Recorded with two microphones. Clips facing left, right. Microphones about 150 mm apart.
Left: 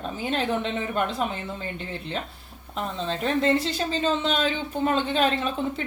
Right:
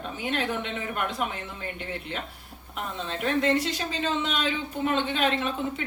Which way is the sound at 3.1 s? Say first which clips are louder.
Left 2 dB; 30° left (ahead or behind).